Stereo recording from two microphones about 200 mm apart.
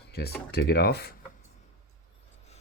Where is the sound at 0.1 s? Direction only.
55° left (ahead or behind).